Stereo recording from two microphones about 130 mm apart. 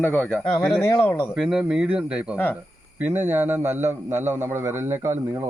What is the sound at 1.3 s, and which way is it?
A man's voice, 5° right (ahead or behind).